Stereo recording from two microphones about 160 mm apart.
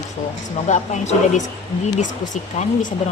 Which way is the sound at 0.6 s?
50° left (ahead or behind).